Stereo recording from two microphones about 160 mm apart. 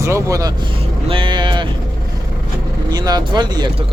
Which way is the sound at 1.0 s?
30° right (ahead or behind).